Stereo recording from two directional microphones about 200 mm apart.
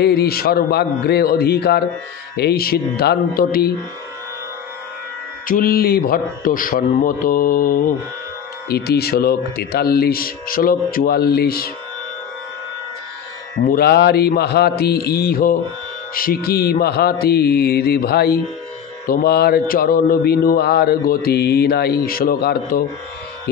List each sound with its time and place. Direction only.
0.0 s speech: 55° left (ahead or behind)
5.5 s speech: 45° left (ahead or behind)
13.7 s speech: 50° left (ahead or behind)